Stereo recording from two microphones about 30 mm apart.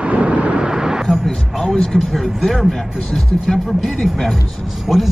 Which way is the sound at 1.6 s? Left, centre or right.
Centre.